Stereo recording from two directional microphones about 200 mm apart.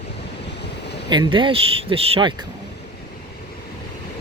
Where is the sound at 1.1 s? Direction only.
25° right (ahead or behind).